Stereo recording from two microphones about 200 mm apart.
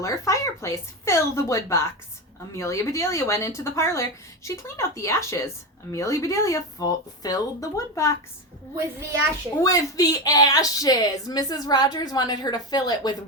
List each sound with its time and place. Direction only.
0.0 s a woman's voice: 15° left (ahead or behind)
9.6 s speech: 15° left (ahead or behind)